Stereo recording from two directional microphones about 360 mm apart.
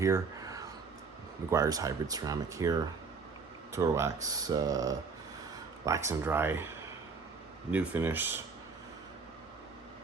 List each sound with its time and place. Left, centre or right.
0.0 s a sound: centre
1.5 s speech: centre
7.7 s speech: centre